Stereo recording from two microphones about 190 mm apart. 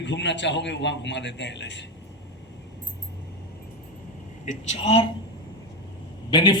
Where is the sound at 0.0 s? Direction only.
70° left (ahead or behind).